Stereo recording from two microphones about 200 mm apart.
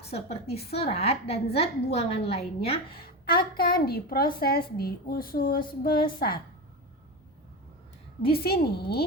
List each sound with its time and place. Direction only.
0.0 s a woman's voice: 30° left (ahead or behind)
3.0 s a woman's voice: 50° left (ahead or behind)
8.3 s a woman's voice: 50° left (ahead or behind)